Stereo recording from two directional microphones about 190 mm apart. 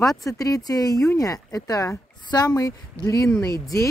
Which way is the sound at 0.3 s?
20° left (ahead or behind).